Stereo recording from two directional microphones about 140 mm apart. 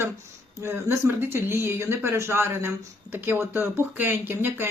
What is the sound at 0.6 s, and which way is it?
Speech, 15° right (ahead or behind).